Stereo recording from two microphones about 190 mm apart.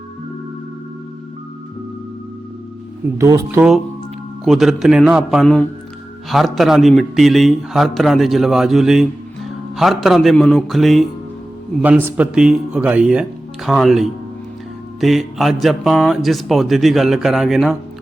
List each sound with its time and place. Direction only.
3.2 s a man's voice: 15° right (ahead or behind)
4.4 s a man's voice: centre (ahead or behind)